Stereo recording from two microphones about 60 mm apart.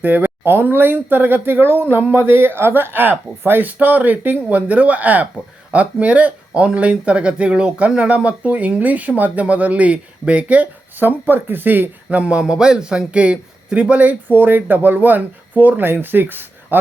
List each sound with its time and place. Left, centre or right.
0.0 s speech: right
12.1 s speech: centre; by 16.7 s right